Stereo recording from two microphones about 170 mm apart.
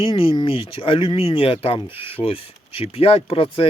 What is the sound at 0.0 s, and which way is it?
Speech, 30° left (ahead or behind).